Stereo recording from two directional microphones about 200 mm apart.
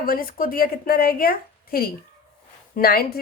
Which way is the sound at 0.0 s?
45° left (ahead or behind).